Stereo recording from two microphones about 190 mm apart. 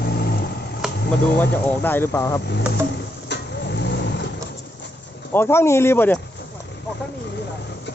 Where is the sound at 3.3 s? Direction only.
60° left (ahead or behind).